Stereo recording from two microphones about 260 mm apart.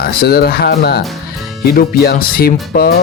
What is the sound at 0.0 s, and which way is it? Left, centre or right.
Speech, left.